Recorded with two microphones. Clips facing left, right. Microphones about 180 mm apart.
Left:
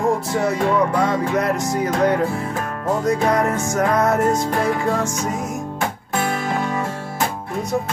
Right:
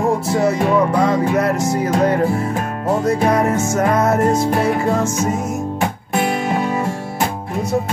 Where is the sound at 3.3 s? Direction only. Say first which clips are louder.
Right 3 dB; 5° right (ahead or behind).